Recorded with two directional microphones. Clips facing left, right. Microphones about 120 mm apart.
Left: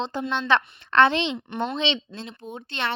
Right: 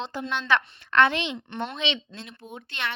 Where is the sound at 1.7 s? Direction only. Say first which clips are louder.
Left 4 dB; 30° left (ahead or behind).